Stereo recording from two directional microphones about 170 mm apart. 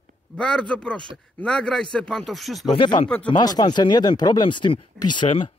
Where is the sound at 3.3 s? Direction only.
25° left (ahead or behind).